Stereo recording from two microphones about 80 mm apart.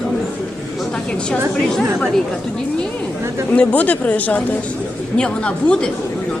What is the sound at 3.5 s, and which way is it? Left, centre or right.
A woman's voice, centre.